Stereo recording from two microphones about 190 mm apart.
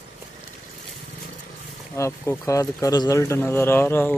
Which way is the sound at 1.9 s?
15° left (ahead or behind).